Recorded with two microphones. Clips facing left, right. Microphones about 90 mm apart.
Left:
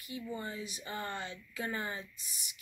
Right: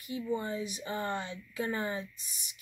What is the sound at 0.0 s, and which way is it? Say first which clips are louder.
Speech: right 6 dB; 25° right (ahead or behind).